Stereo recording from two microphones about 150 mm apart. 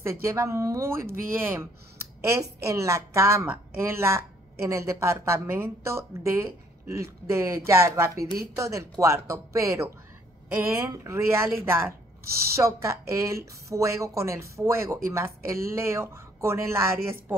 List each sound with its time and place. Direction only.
0.0 s a woman's voice: 20° right (ahead or behind)
12.5 s a woman's voice: 20° right (ahead or behind)